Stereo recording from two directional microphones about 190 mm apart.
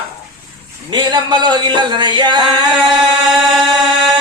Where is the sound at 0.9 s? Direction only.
25° right (ahead or behind).